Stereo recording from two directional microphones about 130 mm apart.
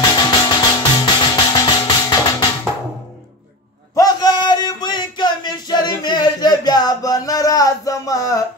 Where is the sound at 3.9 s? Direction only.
30° left (ahead or behind).